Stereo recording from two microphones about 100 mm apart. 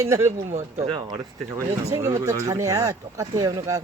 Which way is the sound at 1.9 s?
30° right (ahead or behind).